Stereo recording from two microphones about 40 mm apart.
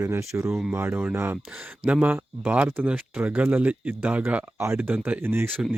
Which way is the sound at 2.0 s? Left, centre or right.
Right.